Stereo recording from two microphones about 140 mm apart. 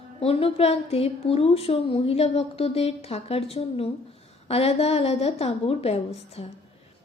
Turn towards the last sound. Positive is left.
turn(degrees=50)  # may be behind; listen again after turning